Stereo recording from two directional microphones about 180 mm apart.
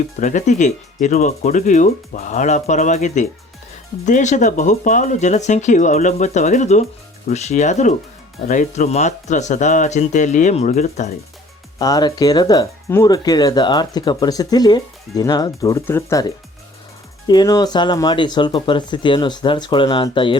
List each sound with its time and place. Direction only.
0.2 s speech: 45° left (ahead or behind)
11.8 s speech: 20° left (ahead or behind)
17.2 s speech: 20° left (ahead or behind)